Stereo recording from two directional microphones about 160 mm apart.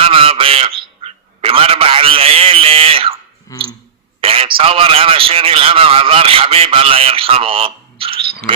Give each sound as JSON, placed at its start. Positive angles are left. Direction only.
{"t": 0.0, "sound": "a sound", "side_deg": -35}
{"t": 3.5, "sound": "clicking", "side_deg": 20}
{"t": 4.2, "sound": "a man's voice", "side_deg": -35}